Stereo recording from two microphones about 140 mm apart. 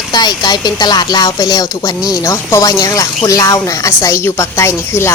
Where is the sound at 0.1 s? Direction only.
30° left (ahead or behind).